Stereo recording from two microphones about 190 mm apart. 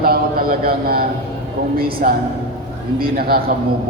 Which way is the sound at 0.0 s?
50° right (ahead or behind).